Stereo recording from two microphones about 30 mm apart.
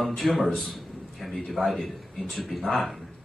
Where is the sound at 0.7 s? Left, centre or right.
Centre.